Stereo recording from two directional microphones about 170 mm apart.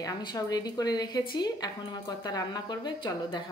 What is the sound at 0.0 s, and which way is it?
Speech, 25° left (ahead or behind).